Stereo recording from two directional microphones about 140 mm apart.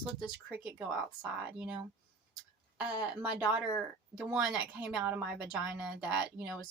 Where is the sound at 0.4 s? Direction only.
10° right (ahead or behind).